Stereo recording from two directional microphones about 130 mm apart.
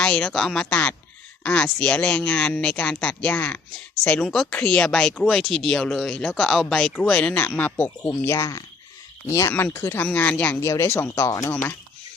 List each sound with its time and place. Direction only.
0.0 s speech: 10° left (ahead or behind)
11.3 s speech: 25° left (ahead or behind)